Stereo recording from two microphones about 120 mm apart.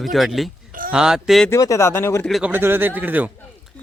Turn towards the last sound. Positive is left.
turn(degrees=-15)  # may be behind; listen again after turning